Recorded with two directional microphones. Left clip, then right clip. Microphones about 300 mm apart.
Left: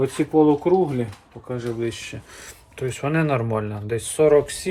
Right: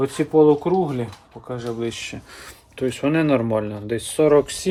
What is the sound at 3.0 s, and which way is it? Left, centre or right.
Speech, right.